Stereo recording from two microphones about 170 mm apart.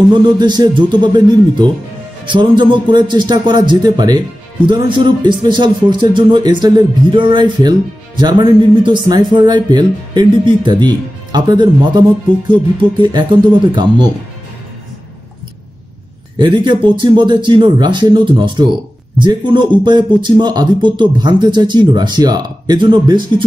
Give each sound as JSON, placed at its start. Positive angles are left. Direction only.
{"t": 0.1, "sound": "speech", "side_deg": -25}
{"t": 13.0, "sound": "speech", "side_deg": -25}
{"t": 16.3, "sound": "speech", "side_deg": -25}